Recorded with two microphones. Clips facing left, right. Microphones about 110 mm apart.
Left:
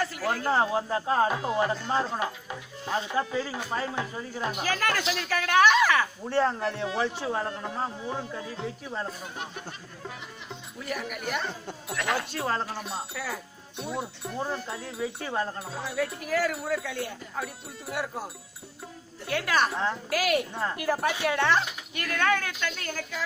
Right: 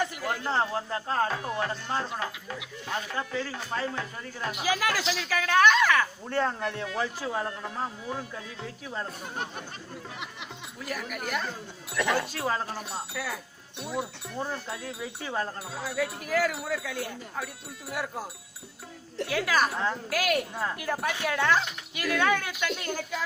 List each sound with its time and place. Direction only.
0.0 s a sound: 20° right (ahead or behind)
0.5 s speech: 10° left (ahead or behind)
4.5 s a woman's voice: 5° right (ahead or behind)
10.8 s a woman's voice: centre (ahead or behind)